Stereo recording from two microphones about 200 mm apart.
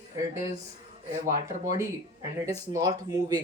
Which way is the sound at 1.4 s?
15° right (ahead or behind).